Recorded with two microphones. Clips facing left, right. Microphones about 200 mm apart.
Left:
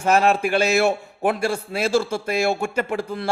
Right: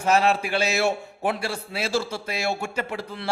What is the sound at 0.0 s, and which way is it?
A man's voice, 50° left (ahead or behind).